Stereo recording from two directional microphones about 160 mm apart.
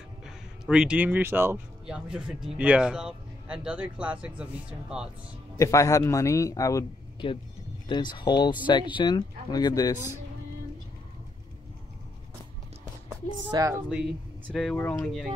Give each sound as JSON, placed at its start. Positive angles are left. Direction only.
{"t": 0.2, "sound": "speech", "side_deg": -5}
{"t": 5.6, "sound": "speech", "side_deg": 20}
{"t": 13.1, "sound": "speech", "side_deg": -20}
{"t": 13.8, "sound": "speech", "side_deg": -5}